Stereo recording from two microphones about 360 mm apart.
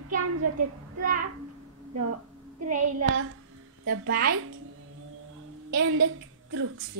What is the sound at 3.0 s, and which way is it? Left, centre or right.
Speech, right.